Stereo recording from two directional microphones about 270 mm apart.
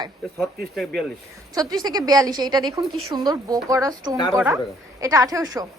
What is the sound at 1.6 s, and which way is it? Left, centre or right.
A woman's voice, centre.